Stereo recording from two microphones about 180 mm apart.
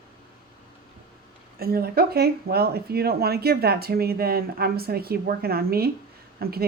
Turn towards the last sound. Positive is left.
turn(degrees=-60)  # may be behind; listen again after turning